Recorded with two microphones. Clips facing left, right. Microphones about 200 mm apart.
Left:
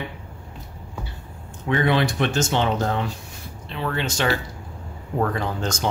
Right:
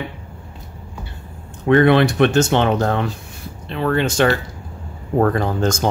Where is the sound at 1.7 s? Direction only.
60° right (ahead or behind).